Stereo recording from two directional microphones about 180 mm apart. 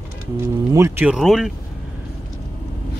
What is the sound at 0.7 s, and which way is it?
Speech, 15° right (ahead or behind).